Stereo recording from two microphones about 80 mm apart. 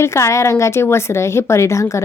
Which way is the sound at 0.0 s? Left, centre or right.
Left.